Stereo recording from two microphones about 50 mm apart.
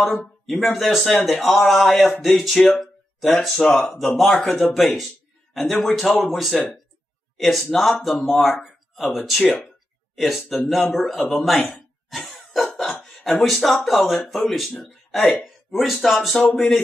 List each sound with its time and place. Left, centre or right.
0.2 s speech: centre
2.7 s a sound: centre
3.3 s speech: centre
6.5 s speech: centre
7.3 s speech: centre
9.4 s speech: centre
10.1 s speech: centre
12.5 s cough: centre
13.2 s speech: centre